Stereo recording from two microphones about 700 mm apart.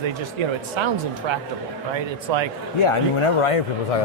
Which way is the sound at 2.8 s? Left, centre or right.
Left.